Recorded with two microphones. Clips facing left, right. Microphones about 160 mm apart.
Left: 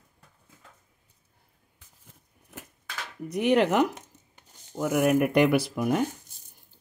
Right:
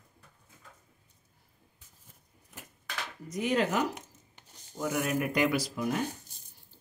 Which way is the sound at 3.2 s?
65° left (ahead or behind).